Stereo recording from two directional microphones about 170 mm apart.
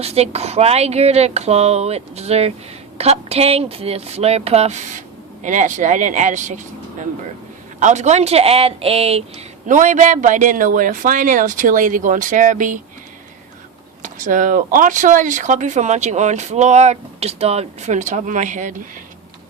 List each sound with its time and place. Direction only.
0.0 s speech: 35° right (ahead or behind)
7.8 s speech: 45° right (ahead or behind)
9.6 s speech: 45° right (ahead or behind)
14.0 s speech: 50° right (ahead or behind)